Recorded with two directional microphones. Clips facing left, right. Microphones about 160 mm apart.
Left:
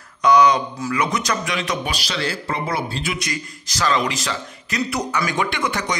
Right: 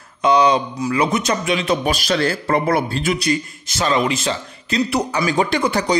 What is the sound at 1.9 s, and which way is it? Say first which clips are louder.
Speech: right 7 dB; 50° right (ahead or behind).